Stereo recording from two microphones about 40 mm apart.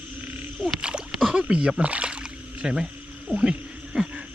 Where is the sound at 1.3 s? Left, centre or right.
Right.